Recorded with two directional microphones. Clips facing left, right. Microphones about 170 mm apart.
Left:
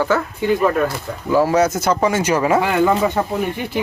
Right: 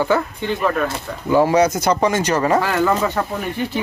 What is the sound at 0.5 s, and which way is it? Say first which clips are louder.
Speech: left 4 dB; 5° left (ahead or behind).